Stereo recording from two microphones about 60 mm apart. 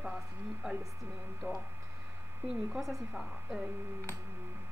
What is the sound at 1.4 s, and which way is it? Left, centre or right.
Speech, right.